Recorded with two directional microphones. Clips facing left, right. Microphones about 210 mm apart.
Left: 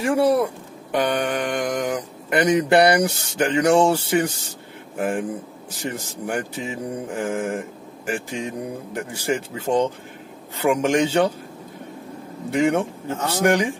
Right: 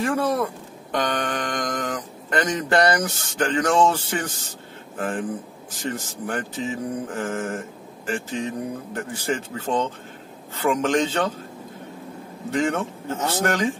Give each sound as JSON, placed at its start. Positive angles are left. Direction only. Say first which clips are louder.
{"t": 0.0, "sound": "speech", "louder": "left 4 dB", "side_deg": 10}
{"t": 12.4, "sound": "speech", "louder": "left 4 dB", "side_deg": 10}